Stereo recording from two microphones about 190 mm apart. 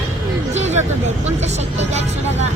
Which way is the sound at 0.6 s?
35° right (ahead or behind).